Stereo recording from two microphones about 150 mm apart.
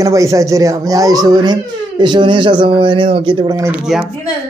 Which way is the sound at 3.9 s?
Centre (ahead or behind).